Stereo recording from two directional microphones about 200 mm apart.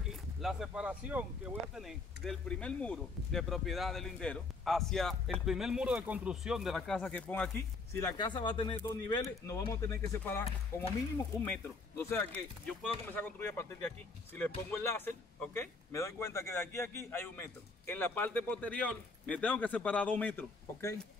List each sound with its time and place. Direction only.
0.1 s speech: centre (ahead or behind)
8.0 s speech: 20° left (ahead or behind)
14.7 s speech: 10° left (ahead or behind)